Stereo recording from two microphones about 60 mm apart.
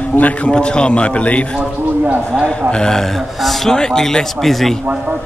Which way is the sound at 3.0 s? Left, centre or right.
Centre.